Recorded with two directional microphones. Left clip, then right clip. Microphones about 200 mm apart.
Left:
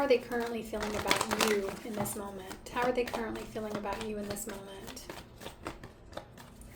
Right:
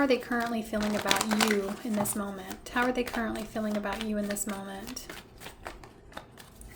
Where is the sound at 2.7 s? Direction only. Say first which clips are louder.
Right 2 dB; 25° right (ahead or behind).